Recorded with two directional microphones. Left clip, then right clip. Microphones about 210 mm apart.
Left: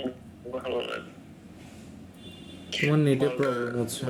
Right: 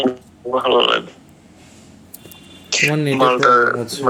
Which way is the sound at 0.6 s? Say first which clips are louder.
Right 17 dB; centre (ahead or behind).